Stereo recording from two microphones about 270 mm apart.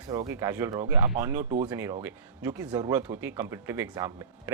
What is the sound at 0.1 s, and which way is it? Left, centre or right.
Speech, centre.